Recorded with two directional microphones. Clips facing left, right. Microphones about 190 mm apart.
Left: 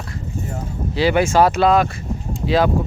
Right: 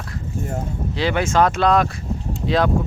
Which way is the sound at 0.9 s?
10° left (ahead or behind).